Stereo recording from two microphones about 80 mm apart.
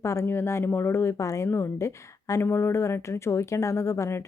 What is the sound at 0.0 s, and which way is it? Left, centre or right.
Speech, left.